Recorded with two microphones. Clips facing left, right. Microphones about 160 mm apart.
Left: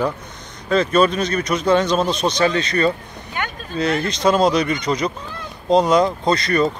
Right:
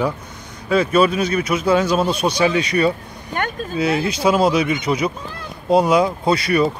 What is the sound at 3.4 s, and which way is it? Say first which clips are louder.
Speech: right 3 dB; 50° right (ahead or behind).